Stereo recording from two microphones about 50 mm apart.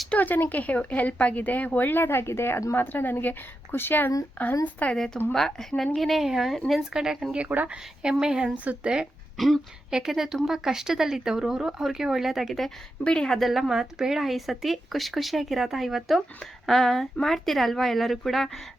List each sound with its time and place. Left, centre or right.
0.2 s speech: left
2.7 s speech: left
4.9 s a woman's voice: centre
8.5 s speech: right
9.4 s speech: centre
9.9 s speech: centre
13.1 s a woman's voice: centre
13.4 s speech: centre